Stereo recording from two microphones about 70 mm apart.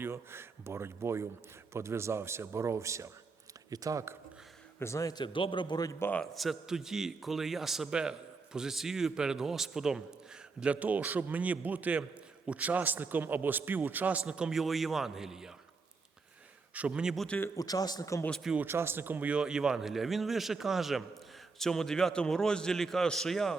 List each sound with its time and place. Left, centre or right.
0.0 s speech: right
3.7 s speech: right
4.8 s speech: left
5.0 s a man's voice: left
6.3 s a man's voice: centre
10.6 s a man's voice: right
16.7 s a man's voice: centre
17.6 s speech: left
18.5 s speech: right
19.3 s a man's voice: centre